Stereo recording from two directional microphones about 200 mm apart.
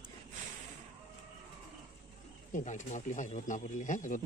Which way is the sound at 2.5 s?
40° left (ahead or behind).